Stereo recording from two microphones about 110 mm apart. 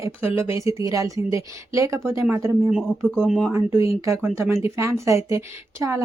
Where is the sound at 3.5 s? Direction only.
25° right (ahead or behind).